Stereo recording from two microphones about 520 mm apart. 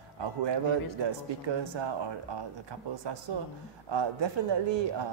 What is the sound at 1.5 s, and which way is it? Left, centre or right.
Speech, right.